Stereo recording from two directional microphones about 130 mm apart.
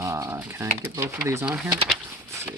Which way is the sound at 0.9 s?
20° right (ahead or behind).